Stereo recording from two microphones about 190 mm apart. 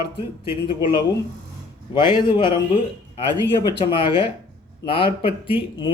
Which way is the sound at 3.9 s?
25° left (ahead or behind).